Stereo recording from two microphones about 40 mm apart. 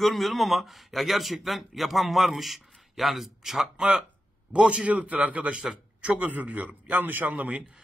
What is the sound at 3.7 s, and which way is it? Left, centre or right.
Speech, centre.